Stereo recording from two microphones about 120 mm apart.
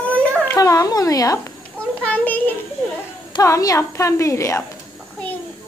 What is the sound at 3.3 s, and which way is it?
Speech, 30° left (ahead or behind).